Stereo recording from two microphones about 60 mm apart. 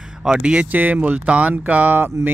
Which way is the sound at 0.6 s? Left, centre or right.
Right.